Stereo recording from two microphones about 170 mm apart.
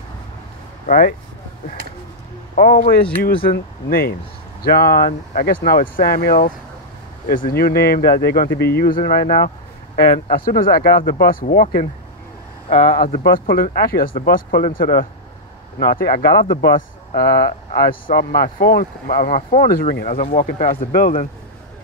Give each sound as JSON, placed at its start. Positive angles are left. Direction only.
{"t": 0.8, "sound": "speech", "side_deg": 50}
{"t": 2.5, "sound": "speech", "side_deg": 50}
{"t": 12.8, "sound": "speech", "side_deg": 55}